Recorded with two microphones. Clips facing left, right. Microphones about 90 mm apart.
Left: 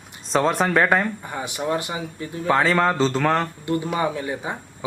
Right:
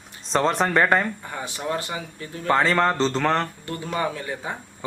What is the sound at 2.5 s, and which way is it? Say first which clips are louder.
Speech: left 1 dB; centre (ahead or behind).